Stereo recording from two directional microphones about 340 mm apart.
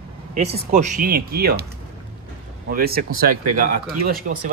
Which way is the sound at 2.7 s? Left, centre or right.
Right.